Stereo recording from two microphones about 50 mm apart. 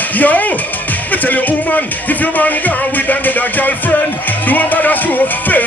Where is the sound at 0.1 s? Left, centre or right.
Left.